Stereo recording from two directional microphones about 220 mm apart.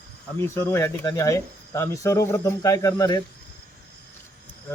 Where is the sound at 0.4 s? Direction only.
10° left (ahead or behind).